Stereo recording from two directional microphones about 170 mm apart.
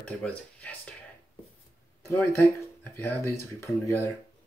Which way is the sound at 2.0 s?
10° left (ahead or behind).